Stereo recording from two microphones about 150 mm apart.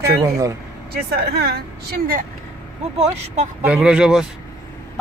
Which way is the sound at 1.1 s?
90° right.